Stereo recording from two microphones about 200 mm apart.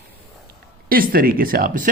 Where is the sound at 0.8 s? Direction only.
45° right (ahead or behind).